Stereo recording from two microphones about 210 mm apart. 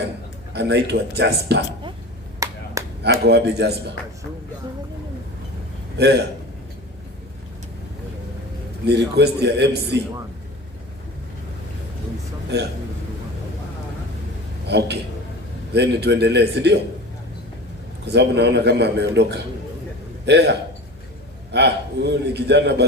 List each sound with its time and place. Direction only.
0.5 s a man's voice: 55° right (ahead or behind)
2.4 s a sound: 15° right (ahead or behind)
3.0 s a man's voice: 55° right (ahead or behind)
6.0 s a man's voice: 55° right (ahead or behind)
8.9 s a man's voice: 55° right (ahead or behind)
14.7 s a man's voice: 55° right (ahead or behind)
18.0 s a man's voice: 55° right (ahead or behind)